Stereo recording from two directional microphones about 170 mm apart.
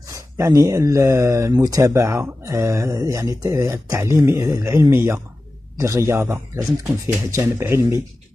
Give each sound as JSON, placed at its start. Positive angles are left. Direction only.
{"t": 0.1, "sound": "speech", "side_deg": -20}